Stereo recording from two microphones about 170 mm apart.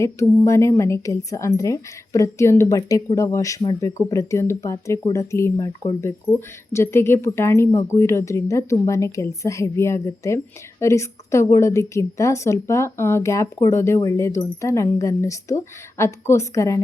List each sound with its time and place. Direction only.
0.0 s speech: 15° left (ahead or behind)